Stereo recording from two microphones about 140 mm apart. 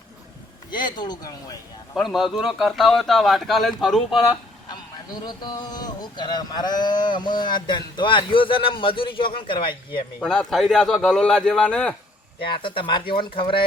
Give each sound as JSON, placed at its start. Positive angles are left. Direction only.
{"t": 0.7, "sound": "speech", "side_deg": 30}
{"t": 2.0, "sound": "speech", "side_deg": 0}
{"t": 4.7, "sound": "speech", "side_deg": 30}
{"t": 10.2, "sound": "speech", "side_deg": 5}
{"t": 12.5, "sound": "speech", "side_deg": 35}